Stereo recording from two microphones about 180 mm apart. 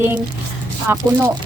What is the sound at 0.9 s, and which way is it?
Speech, 15° right (ahead or behind).